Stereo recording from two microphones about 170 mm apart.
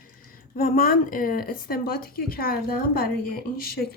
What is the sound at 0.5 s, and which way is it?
Speech, 55° left (ahead or behind).